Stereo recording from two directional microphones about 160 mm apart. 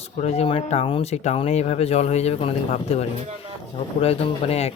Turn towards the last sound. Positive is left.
turn(degrees=40)  # may be behind; listen again after turning